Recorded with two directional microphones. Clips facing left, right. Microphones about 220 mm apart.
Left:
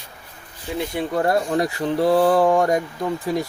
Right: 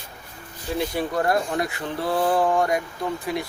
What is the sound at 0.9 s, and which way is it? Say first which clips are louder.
Speech: left 4 dB; 25° left (ahead or behind).